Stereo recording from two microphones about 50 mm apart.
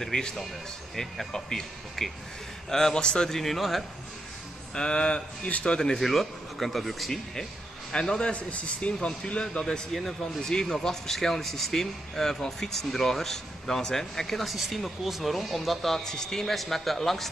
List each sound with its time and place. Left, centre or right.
0.0 s a man's voice: centre
4.7 s a man's voice: centre
5.9 s speech: centre
7.9 s a man's voice: centre